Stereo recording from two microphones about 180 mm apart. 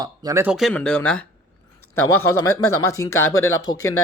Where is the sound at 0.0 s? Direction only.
20° right (ahead or behind).